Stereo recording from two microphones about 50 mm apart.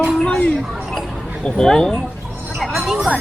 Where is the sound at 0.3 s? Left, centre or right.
Left.